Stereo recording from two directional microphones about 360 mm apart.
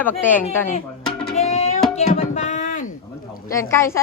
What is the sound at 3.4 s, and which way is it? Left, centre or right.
Speech, centre.